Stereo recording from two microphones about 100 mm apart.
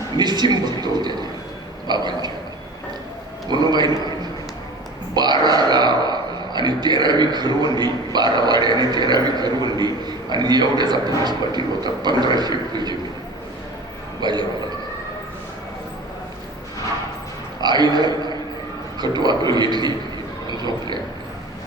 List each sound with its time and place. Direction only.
0.2 s speech: 45° right (ahead or behind)
3.5 s speech: 45° right (ahead or behind)
5.1 s speech: 45° right (ahead or behind)
14.2 s a man's voice: 45° right (ahead or behind)
17.6 s a man's voice: 45° right (ahead or behind)